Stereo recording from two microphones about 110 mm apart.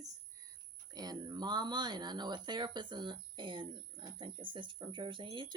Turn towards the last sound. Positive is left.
turn(degrees=-45)  # may be behind; listen again after turning